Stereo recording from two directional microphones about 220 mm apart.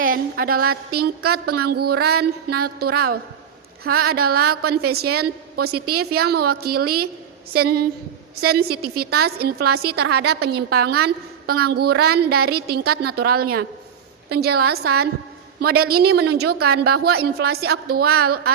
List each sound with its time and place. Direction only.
0.0 s a woman's voice: 40° right (ahead or behind)